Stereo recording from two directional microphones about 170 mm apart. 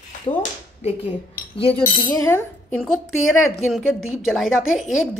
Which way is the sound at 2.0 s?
20° left (ahead or behind).